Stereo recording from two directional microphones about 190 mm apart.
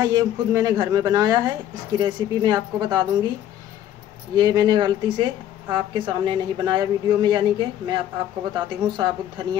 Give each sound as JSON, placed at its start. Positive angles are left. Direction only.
{"t": 0.0, "sound": "a woman's voice", "side_deg": -20}
{"t": 4.4, "sound": "a woman's voice", "side_deg": -20}